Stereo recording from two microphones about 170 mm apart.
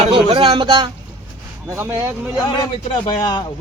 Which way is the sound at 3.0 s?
25° left (ahead or behind).